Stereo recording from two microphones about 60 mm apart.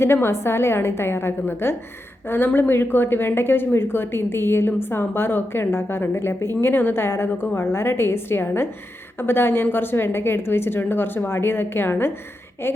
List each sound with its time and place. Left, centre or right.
0.0 s a woman's voice: left